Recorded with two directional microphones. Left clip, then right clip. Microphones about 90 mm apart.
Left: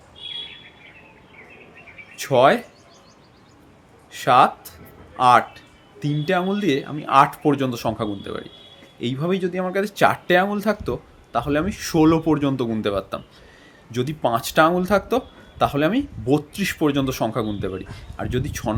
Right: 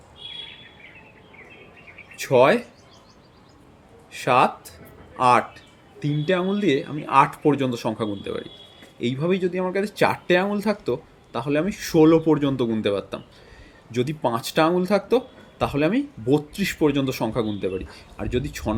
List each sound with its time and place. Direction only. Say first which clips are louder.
2.1 s speech: left 1 dB; 30° left (ahead or behind)
4.1 s speech: left 3 dB; 30° left (ahead or behind)